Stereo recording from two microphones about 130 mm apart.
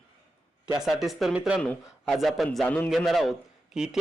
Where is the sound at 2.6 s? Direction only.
15° left (ahead or behind).